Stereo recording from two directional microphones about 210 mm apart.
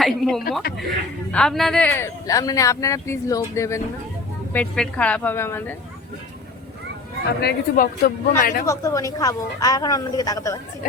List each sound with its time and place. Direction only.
0.0 s speech: centre (ahead or behind)
7.3 s speech: 45° left (ahead or behind)
8.6 s speech: 15° left (ahead or behind)